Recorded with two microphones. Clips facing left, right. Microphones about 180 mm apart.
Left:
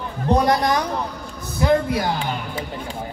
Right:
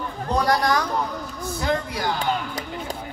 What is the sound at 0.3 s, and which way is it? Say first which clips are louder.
Speech: left 3 dB; 20° left (ahead or behind).